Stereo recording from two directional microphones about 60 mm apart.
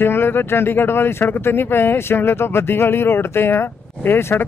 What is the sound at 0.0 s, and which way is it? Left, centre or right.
Speech, left.